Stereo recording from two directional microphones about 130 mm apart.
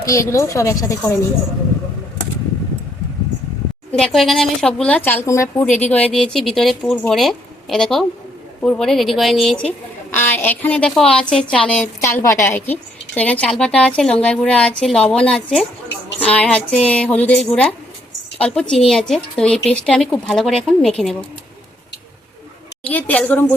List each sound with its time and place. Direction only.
0.0 s a woman's voice: 25° left (ahead or behind)
3.9 s a woman's voice: 5° left (ahead or behind); by 5.6 s 25° left (ahead or behind)
5.7 s a woman's voice: 10° left (ahead or behind)
11.9 s a woman's voice: 25° left (ahead or behind); by 21.2 s 5° left (ahead or behind)
22.9 s a woman's voice: 10° left (ahead or behind)